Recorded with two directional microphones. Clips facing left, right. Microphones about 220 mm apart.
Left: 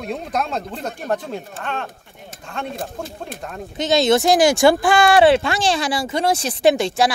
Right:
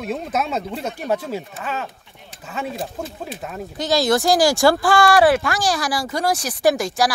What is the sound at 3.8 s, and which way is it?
Speech, 20° left (ahead or behind).